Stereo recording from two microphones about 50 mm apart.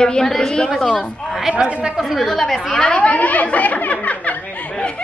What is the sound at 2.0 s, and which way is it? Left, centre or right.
Speech, centre.